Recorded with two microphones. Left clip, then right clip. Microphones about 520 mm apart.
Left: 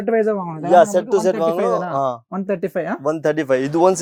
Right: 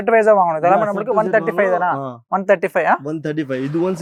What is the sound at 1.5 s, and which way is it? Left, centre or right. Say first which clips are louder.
Speech: right 2 dB; right.